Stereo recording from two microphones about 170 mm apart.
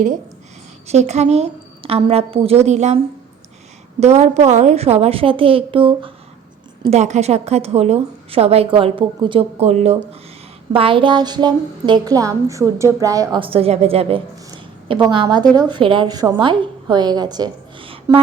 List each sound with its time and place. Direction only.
0.9 s a woman's voice: 40° right (ahead or behind)
4.0 s a woman's voice: 40° right (ahead or behind)